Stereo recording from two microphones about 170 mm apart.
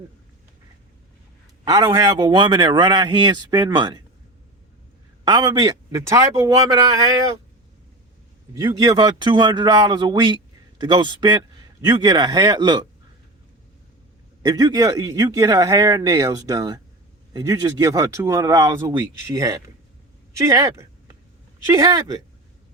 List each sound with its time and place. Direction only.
1.6 s a man's voice: 25° right (ahead or behind)
5.2 s a man's voice: 25° right (ahead or behind)
8.6 s a man's voice: 25° right (ahead or behind)
14.4 s a man's voice: 20° right (ahead or behind)
20.4 s a sound: 15° right (ahead or behind)
21.7 s a man's voice: 20° right (ahead or behind)